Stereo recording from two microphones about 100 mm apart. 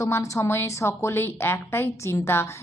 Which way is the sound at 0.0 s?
30° left (ahead or behind).